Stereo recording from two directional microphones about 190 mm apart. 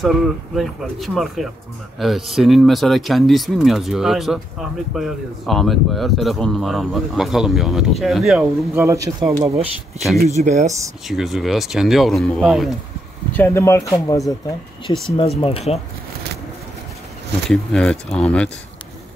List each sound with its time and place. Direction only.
0.0 s speech: centre (ahead or behind)
8.8 s a man's voice: 15° right (ahead or behind)
9.9 s speech: centre (ahead or behind)
10.2 s speech: 35° right (ahead or behind)
11.1 s speech: centre (ahead or behind)
13.3 s speech: 10° left (ahead or behind)
15.4 s speech: 30° left (ahead or behind)
17.5 s speech: 5° left (ahead or behind)